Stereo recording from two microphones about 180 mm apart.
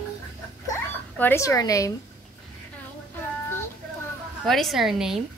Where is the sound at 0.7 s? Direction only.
15° left (ahead or behind).